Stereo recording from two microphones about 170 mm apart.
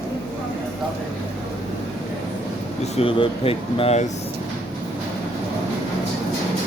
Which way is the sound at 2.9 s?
35° left (ahead or behind).